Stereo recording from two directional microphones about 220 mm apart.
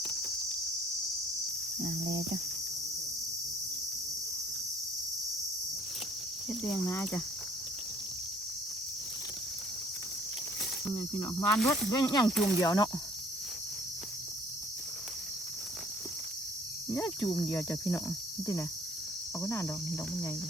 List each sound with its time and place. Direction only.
0.0 s cricket: 5° left (ahead or behind)
6.5 s speech: 5° left (ahead or behind)
10.9 s cricket: 20° left (ahead or behind)
16.9 s cricket: 10° left (ahead or behind)
19.4 s cricket: 10° left (ahead or behind)